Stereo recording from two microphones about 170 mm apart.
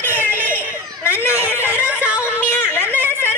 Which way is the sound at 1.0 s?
15° left (ahead or behind).